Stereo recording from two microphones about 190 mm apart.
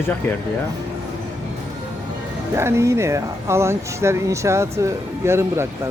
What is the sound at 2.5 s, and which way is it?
Speech, 15° right (ahead or behind).